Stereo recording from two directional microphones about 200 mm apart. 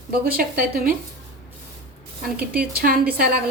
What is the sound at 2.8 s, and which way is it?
Speech, 45° right (ahead or behind).